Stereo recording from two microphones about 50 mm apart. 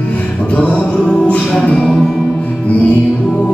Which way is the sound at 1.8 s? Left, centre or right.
Centre.